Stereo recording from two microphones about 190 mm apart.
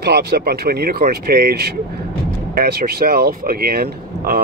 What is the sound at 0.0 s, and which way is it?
Speech, 60° right (ahead or behind).